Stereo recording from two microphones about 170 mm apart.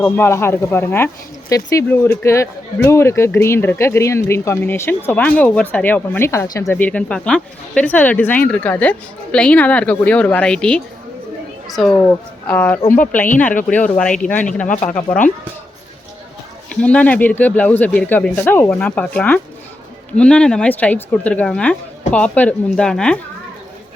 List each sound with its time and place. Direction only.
0.0 s speech: 15° left (ahead or behind)
14.7 s speech: 50° left (ahead or behind)
16.6 s speech: 5° left (ahead or behind)